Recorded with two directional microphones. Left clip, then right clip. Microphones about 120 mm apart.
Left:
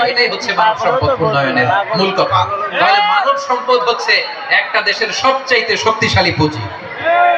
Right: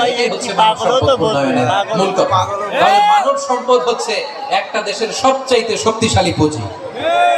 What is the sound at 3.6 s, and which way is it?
Speech, 15° right (ahead or behind).